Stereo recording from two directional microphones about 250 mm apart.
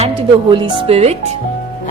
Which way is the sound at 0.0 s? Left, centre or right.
Right.